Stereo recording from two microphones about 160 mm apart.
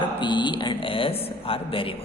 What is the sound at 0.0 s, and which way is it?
A man's voice, 30° left (ahead or behind).